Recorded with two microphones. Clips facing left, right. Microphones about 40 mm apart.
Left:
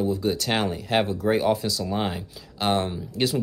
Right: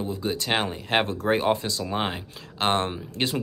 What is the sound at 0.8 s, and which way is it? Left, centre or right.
Speech, right.